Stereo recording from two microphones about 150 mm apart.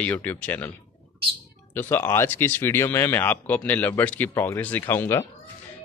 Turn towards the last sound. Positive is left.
turn(degrees=15)  # may be behind; listen again after turning